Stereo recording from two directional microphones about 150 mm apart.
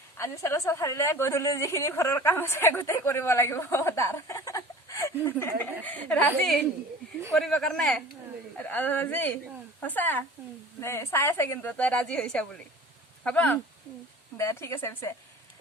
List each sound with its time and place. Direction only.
0.2 s a woman's voice: 20° left (ahead or behind)